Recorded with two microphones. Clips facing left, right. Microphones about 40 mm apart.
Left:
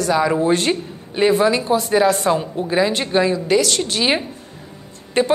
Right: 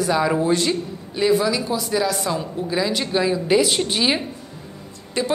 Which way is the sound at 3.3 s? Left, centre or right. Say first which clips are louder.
Left 1 dB; centre.